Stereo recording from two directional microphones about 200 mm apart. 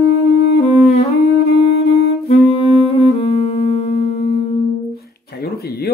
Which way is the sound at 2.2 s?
30° left (ahead or behind).